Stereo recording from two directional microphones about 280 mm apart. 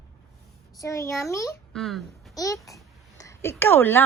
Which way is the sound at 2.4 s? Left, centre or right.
Centre.